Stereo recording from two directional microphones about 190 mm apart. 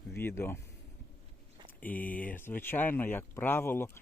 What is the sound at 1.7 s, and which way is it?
Speech, 10° left (ahead or behind).